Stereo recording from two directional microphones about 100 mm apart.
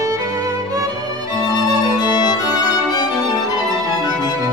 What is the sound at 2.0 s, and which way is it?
Music, 40° left (ahead or behind).